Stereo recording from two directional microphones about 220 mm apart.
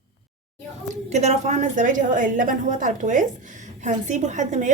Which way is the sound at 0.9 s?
30° right (ahead or behind).